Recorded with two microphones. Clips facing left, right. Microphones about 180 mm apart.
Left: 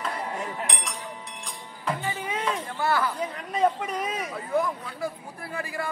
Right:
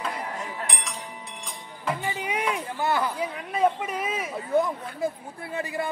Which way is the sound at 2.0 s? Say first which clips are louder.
Right 2 dB; 15° right (ahead or behind).